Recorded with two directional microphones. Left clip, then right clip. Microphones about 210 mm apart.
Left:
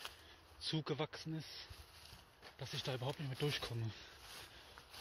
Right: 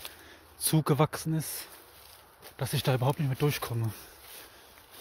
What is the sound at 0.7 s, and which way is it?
Speech, 35° right (ahead or behind).